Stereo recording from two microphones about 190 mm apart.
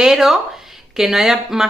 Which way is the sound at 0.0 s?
Centre (ahead or behind).